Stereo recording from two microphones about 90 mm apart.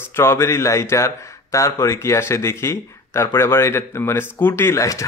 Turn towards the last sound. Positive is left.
turn(degrees=35)  # may be behind; listen again after turning